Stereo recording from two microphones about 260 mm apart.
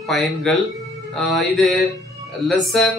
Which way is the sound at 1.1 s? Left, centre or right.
Centre.